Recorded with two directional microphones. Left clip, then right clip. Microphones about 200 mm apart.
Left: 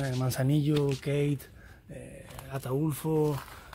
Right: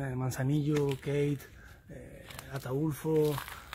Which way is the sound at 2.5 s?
45° left (ahead or behind).